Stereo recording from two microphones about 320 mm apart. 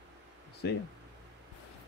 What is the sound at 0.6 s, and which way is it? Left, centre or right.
Speech, left.